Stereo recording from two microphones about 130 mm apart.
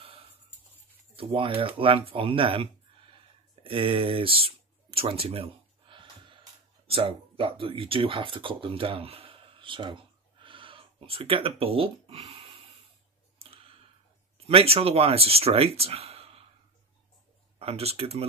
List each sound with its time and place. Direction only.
1.1 s speech: 45° right (ahead or behind)
3.6 s a sound: 45° right (ahead or behind)
6.9 s speech: 45° right (ahead or behind)
13.4 s clicking: 50° right (ahead or behind)
14.5 s speech: 50° right (ahead or behind)
17.6 s speech: 50° right (ahead or behind)